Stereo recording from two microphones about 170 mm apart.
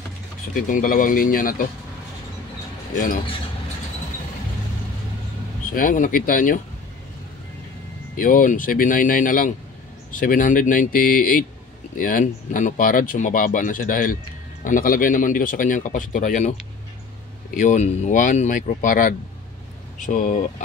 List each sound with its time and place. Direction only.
0.6 s speech: 55° left (ahead or behind)
5.7 s speech: 50° left (ahead or behind)
8.2 s speech: 55° left (ahead or behind)
17.6 s speech: 45° left (ahead or behind)